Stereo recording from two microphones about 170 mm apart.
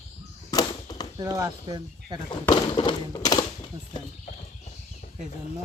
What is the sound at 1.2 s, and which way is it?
Speech, 20° right (ahead or behind).